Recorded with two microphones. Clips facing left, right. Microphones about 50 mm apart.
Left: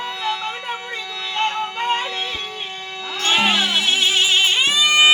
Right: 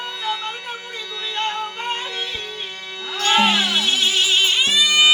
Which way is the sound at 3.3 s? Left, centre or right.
Centre.